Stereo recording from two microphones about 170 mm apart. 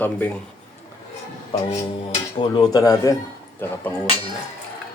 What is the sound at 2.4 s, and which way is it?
Speech, 25° left (ahead or behind).